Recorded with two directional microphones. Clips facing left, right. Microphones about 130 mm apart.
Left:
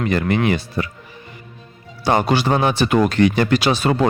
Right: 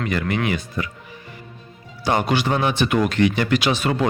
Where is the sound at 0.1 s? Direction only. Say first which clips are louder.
Left 5 dB; 35° left (ahead or behind).